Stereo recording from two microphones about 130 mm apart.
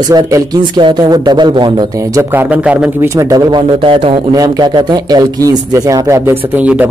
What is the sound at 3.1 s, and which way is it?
Speech, 25° right (ahead or behind).